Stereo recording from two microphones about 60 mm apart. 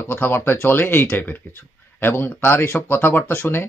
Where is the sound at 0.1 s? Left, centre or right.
Left.